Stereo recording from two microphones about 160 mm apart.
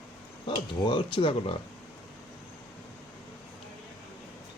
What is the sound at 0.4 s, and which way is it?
Speech, 30° left (ahead or behind).